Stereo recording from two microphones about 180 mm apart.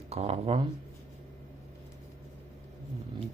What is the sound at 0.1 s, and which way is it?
Speech, 35° right (ahead or behind).